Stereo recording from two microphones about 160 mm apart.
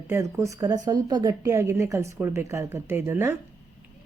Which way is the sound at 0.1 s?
20° right (ahead or behind).